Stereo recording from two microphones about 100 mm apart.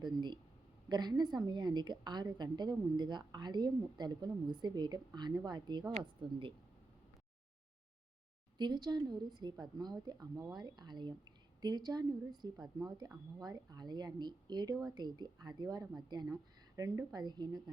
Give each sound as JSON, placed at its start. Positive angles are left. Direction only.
{"t": 0.0, "sound": "a woman's voice", "side_deg": -45}
{"t": 8.5, "sound": "a woman's voice", "side_deg": -45}
{"t": 17.2, "sound": "a woman's voice", "side_deg": -45}